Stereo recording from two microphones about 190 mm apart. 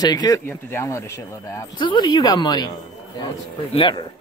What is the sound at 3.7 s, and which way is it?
Speech, 25° left (ahead or behind).